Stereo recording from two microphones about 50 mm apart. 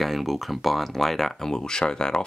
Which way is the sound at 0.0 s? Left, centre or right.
Centre.